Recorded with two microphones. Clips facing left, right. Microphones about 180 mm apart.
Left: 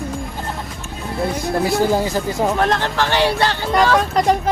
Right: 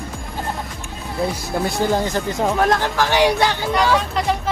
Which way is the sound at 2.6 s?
10° right (ahead or behind).